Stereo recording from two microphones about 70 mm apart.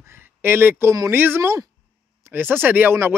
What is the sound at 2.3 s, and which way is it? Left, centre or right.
Speech, right.